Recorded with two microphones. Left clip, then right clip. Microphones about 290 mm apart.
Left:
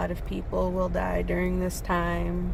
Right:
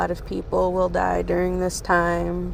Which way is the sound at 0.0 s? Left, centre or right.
Centre.